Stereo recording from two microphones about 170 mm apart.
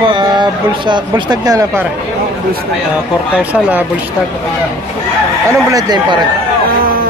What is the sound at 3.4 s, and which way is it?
Speech, 5° right (ahead or behind).